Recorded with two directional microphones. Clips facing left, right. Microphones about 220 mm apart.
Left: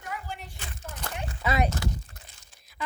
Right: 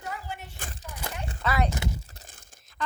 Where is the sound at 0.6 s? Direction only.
50° right (ahead or behind).